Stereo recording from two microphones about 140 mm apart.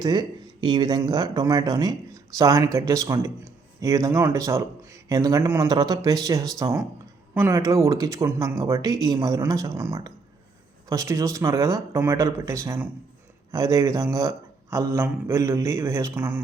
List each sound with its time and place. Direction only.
0.0 s a man's voice: 30° right (ahead or behind)